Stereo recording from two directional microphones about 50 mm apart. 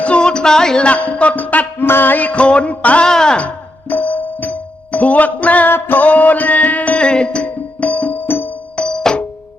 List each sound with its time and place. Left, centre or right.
0.0 s music: left
0.9 s music: left
1.9 s music: left
2.1 s music: left
3.1 s speech: centre
3.3 s music: left
6.9 s music: centre